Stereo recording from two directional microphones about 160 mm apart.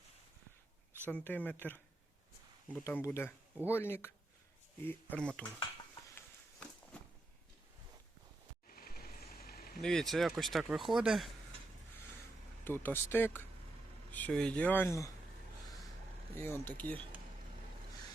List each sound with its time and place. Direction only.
1.0 s speech: 10° left (ahead or behind)
2.8 s speech: 15° left (ahead or behind)
8.7 s vehicle: 70° left (ahead or behind)
9.8 s speech: centre (ahead or behind)
12.6 s speech: 15° left (ahead or behind)
16.4 s speech: 10° left (ahead or behind)